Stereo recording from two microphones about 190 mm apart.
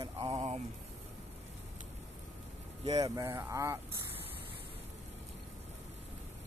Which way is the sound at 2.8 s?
30° right (ahead or behind).